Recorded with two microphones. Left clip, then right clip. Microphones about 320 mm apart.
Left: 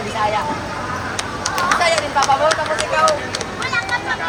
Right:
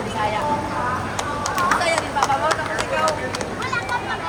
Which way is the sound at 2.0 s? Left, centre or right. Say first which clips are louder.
Left 4 dB; centre.